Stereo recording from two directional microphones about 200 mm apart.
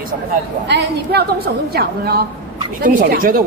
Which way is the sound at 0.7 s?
50° right (ahead or behind).